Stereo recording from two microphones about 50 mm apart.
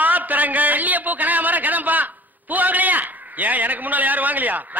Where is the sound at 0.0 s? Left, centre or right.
Right.